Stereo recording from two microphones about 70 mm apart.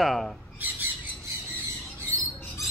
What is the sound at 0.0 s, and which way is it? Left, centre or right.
Speech, centre.